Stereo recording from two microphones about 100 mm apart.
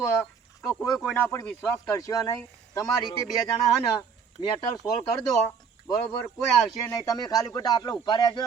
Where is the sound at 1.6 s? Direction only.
30° left (ahead or behind).